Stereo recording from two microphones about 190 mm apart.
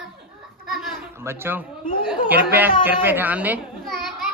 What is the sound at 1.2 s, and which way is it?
A child's voice, 10° right (ahead or behind).